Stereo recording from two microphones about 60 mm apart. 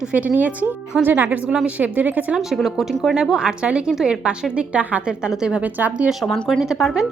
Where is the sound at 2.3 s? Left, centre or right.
Centre.